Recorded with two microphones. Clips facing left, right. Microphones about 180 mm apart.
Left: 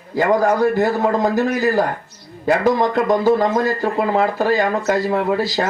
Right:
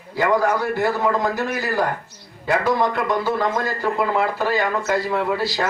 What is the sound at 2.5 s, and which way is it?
Speech, 45° left (ahead or behind).